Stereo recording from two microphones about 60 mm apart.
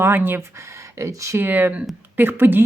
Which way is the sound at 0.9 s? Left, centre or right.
Right.